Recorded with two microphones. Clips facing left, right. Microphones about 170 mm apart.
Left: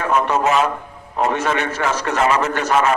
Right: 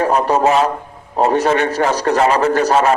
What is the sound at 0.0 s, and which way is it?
A man's voice, 35° right (ahead or behind).